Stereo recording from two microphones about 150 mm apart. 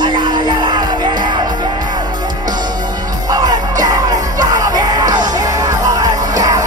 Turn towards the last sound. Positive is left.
turn(degrees=-25)  # may be behind; listen again after turning